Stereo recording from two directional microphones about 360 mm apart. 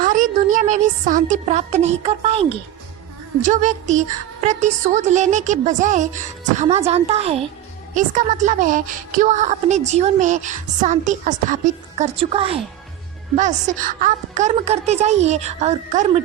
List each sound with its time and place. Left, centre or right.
0.0 s a woman's voice: right